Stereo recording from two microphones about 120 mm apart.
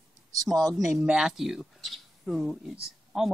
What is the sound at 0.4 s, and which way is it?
Speech, centre (ahead or behind).